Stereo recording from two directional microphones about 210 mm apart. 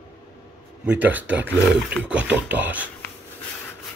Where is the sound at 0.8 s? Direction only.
5° right (ahead or behind).